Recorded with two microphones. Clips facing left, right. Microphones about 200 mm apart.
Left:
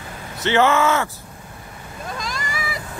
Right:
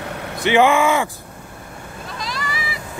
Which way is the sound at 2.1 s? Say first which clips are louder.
Right 3 dB; 45° left (ahead or behind).